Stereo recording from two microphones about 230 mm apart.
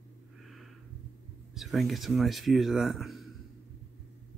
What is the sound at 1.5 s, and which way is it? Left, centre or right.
Speech, centre.